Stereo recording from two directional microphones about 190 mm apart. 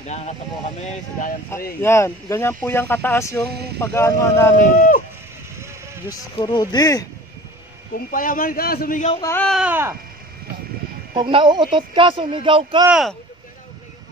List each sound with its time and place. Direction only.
0.0 s speech: 35° left (ahead or behind)
1.8 s speech: 15° left (ahead or behind)
4.6 s a man's voice: 45° left (ahead or behind)
6.0 s speech: 20° left (ahead or behind)
8.1 s a man's voice: 45° left (ahead or behind)
9.2 s speech: 10° left (ahead or behind)
9.5 s speech: 5° right (ahead or behind)
11.1 s a man's voice: 25° right (ahead or behind)
12.8 s speech: 5° right (ahead or behind)